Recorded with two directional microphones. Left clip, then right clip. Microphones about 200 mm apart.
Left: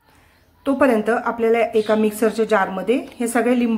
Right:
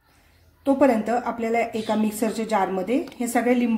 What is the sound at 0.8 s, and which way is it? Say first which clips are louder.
A woman's voice: left 4 dB; 15° left (ahead or behind).